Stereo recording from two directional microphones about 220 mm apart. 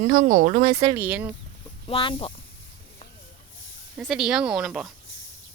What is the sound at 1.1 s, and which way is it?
Speech, 5° right (ahead or behind).